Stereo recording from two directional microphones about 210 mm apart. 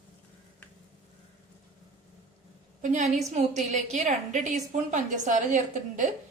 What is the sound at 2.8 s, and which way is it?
A woman's voice, 35° right (ahead or behind).